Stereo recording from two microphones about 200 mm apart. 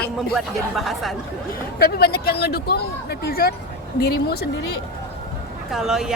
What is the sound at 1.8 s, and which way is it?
A woman's voice, 50° left (ahead or behind).